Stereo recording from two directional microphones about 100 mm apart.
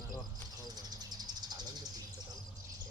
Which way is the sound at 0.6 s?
40° right (ahead or behind).